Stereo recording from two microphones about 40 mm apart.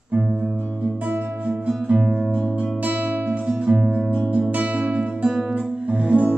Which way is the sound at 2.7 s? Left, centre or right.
Right.